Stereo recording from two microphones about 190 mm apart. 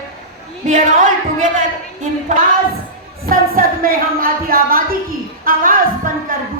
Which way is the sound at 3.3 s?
50° right (ahead or behind).